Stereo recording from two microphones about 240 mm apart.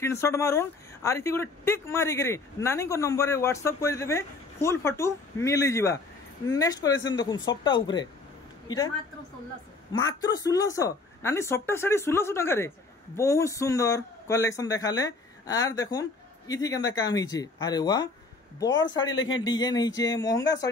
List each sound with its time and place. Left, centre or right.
0.0 s a woman's voice: centre
10.0 s speech: centre
18.7 s a man's voice: left
19.4 s speech: centre